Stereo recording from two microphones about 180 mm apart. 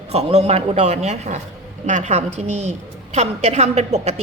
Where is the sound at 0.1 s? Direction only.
35° right (ahead or behind).